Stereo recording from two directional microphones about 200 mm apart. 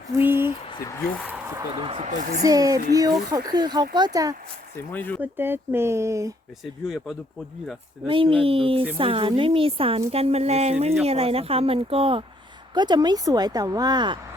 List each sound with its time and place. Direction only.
0.2 s a sound: 10° right (ahead or behind)
0.8 s speech: 15° left (ahead or behind)
1.7 s a woman's voice: 25° right (ahead or behind)
4.8 s speech: 10° left (ahead or behind)
5.2 s speech: 10° right (ahead or behind)
6.8 s speech: 5° right (ahead or behind)
8.0 s a woman's voice: 25° right (ahead or behind)